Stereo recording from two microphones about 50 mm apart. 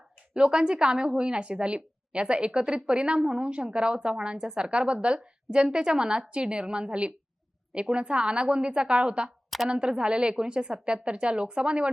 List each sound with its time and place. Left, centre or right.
0.3 s a woman's voice: centre